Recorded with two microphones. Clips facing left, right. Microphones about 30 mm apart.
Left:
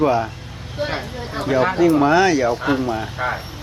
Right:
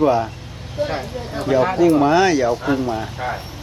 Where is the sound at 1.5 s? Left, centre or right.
Centre.